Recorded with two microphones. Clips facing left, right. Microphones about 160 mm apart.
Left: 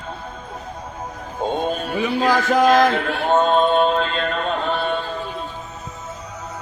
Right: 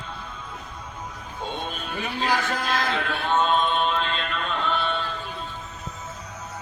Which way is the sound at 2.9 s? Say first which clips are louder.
Left 6 dB; 45° left (ahead or behind).